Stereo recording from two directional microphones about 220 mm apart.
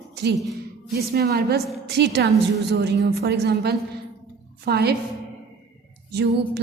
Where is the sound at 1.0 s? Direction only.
45° right (ahead or behind).